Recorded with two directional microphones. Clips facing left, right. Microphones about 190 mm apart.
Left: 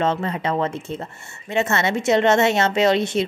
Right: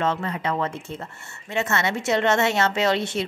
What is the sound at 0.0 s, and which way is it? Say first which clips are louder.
A woman's voice: left 3 dB; 25° left (ahead or behind).